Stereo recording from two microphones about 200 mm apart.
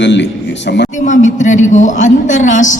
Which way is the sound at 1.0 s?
40° left (ahead or behind).